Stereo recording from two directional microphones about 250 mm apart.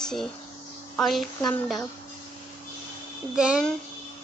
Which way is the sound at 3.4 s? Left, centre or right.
Centre.